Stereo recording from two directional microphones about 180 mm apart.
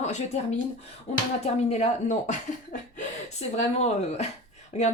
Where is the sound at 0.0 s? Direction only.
40° left (ahead or behind).